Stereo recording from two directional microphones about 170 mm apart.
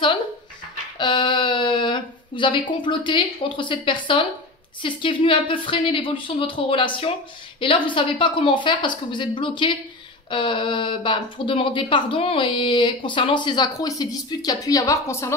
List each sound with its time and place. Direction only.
0.9 s a woman's voice: 25° left (ahead or behind)